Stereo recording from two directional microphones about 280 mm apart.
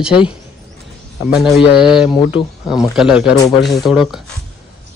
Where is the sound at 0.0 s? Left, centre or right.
Centre.